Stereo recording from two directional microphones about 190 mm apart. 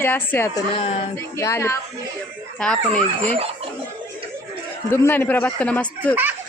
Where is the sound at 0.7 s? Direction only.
30° left (ahead or behind).